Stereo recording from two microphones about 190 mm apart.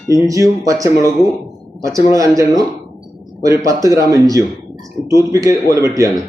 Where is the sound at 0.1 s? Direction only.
15° right (ahead or behind).